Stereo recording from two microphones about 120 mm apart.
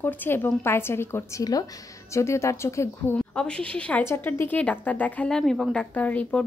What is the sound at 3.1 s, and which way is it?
Speech, 10° left (ahead or behind).